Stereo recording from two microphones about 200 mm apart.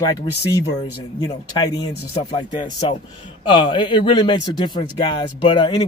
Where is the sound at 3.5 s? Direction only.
25° left (ahead or behind).